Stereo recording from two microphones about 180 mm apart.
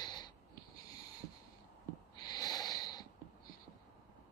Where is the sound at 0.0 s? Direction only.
25° left (ahead or behind).